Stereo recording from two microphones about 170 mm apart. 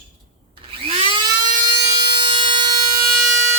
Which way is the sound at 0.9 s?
30° right (ahead or behind).